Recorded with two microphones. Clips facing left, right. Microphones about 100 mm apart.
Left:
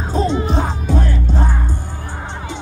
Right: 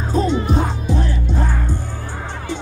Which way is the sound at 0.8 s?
50° left (ahead or behind).